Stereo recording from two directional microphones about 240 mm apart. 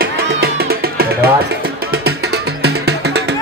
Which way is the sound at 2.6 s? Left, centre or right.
Right.